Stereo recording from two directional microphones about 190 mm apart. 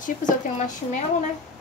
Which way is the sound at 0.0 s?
40° left (ahead or behind).